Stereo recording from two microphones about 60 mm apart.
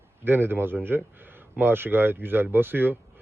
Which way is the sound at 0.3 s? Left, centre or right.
Right.